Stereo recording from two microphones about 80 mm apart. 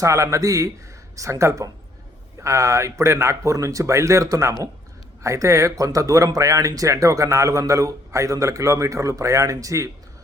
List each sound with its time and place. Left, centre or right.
0.0 s speech: right